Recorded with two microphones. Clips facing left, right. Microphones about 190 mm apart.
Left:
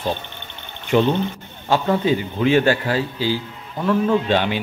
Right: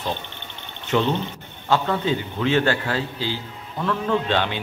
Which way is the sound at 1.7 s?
15° left (ahead or behind).